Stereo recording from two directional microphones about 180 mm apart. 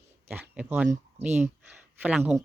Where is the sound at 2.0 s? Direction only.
5° right (ahead or behind).